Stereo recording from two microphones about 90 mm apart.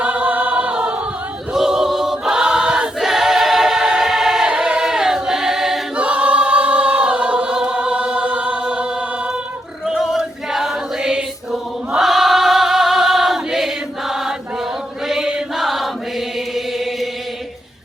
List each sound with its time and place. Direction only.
0.0 s choir: 15° right (ahead or behind)
16.6 s chant: centre (ahead or behind)